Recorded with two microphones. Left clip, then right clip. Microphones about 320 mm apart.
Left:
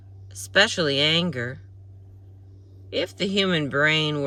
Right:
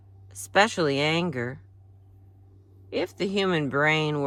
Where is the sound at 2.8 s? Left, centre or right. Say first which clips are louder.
Left 2 dB; centre.